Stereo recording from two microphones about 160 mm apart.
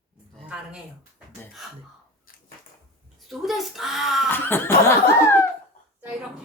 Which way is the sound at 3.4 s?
Centre (ahead or behind).